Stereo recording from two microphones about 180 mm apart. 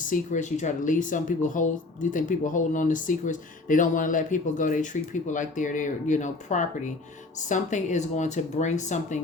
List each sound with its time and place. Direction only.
0.1 s speech: 45° left (ahead or behind)